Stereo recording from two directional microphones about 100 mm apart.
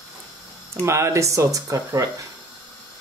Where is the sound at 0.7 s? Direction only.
30° right (ahead or behind).